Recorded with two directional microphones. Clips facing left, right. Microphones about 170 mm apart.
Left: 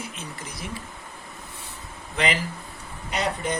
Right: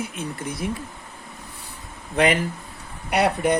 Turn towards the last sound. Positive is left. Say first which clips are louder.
# right 7 dB
turn(degrees=-65)  # may be behind; listen again after turning